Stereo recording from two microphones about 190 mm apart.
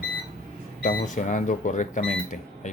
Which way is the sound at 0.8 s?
40° left (ahead or behind).